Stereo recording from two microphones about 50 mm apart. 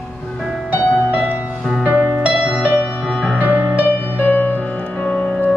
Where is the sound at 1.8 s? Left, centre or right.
Right.